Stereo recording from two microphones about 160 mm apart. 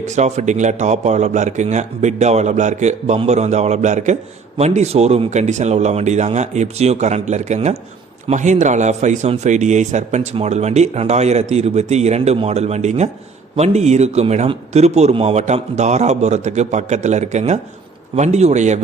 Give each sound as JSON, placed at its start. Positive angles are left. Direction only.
{"t": 0.2, "sound": "a man's voice", "side_deg": -45}